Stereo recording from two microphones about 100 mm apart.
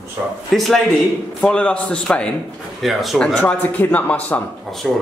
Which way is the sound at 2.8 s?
Centre (ahead or behind).